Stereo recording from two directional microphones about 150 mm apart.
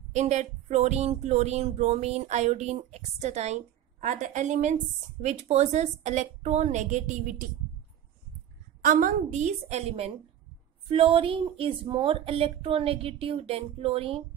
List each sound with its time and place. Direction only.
0.1 s speech: 50° right (ahead or behind)
8.8 s a woman's voice: 65° right (ahead or behind)
9.3 s speech: 50° right (ahead or behind)